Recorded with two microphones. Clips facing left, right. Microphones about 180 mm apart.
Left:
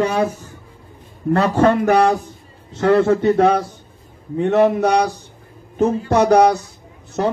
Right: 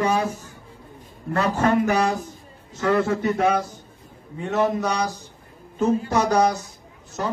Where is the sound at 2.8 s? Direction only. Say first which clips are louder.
Left 6 dB; 75° left (ahead or behind).